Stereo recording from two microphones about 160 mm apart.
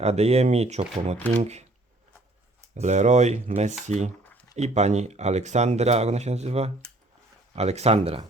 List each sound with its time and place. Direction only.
0.0 s speech: 40° right (ahead or behind)
2.7 s speech: 45° right (ahead or behind)